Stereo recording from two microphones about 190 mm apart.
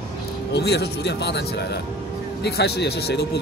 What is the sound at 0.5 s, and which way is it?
Speech, 60° left (ahead or behind).